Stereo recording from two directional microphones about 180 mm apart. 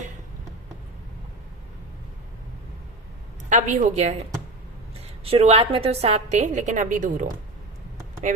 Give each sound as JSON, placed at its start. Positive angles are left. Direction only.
{"t": 3.5, "sound": "a woman's voice", "side_deg": -40}
{"t": 5.2, "sound": "a woman's voice", "side_deg": -35}